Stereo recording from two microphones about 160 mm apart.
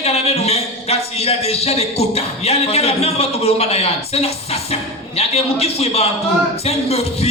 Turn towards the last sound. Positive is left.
turn(degrees=40)  # may be behind; listen again after turning